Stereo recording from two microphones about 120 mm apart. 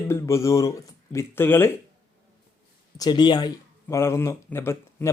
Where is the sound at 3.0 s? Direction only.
40° left (ahead or behind).